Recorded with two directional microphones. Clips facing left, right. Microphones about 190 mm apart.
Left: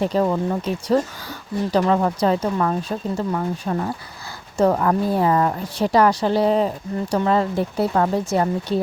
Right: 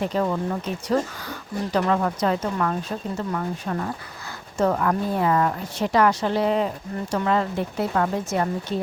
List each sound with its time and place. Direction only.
0.0 s speech: 35° left (ahead or behind)